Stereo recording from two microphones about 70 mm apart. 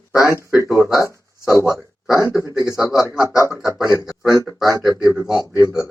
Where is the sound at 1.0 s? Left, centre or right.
Left.